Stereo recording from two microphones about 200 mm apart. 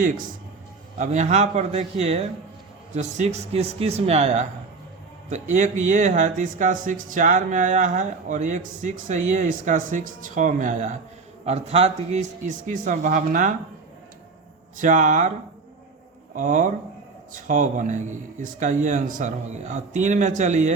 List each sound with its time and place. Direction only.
0.9 s speech: 35° right (ahead or behind)
14.8 s speech: 40° right (ahead or behind)
16.3 s speech: 40° right (ahead or behind)